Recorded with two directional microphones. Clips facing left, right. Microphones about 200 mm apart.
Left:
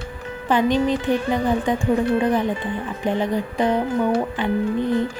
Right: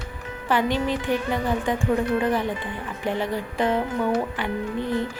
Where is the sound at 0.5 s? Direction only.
20° left (ahead or behind).